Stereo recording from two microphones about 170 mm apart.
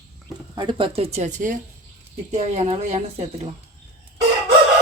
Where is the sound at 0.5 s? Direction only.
30° right (ahead or behind).